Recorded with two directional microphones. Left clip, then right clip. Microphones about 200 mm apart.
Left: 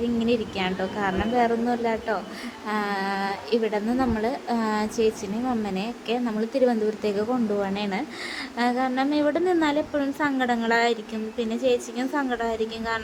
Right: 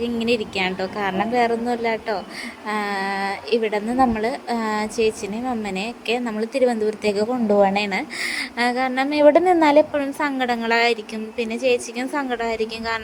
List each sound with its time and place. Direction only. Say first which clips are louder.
0.0 s a woman's voice: right 3 dB; 25° right (ahead or behind)